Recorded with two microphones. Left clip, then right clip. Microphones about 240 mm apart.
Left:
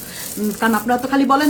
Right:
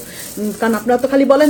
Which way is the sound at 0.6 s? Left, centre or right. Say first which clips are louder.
Right 3 dB; centre.